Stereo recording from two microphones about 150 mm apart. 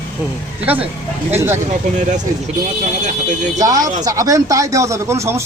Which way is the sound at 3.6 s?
25° right (ahead or behind).